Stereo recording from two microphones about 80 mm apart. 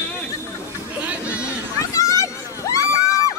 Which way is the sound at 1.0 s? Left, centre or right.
Centre.